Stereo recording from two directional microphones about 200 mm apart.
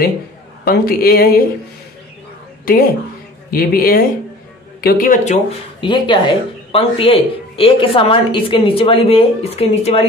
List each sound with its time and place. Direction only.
0.7 s a man's voice: 50° left (ahead or behind)
2.6 s a man's voice: 45° left (ahead or behind)
5.8 s speech: 25° left (ahead or behind)